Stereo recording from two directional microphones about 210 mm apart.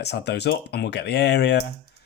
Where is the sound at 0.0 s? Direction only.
50° left (ahead or behind).